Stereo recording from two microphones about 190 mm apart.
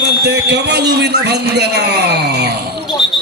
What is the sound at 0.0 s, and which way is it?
A man's voice, 60° right (ahead or behind).